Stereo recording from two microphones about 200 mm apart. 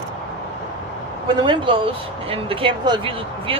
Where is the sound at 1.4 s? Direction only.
25° right (ahead or behind).